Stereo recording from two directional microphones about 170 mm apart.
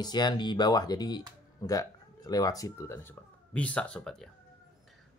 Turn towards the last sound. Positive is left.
turn(degrees=0)  # may be behind; listen again after turning